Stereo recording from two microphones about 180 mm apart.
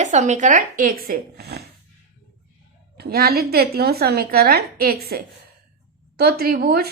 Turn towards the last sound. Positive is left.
turn(degrees=-60)  # may be behind; listen again after turning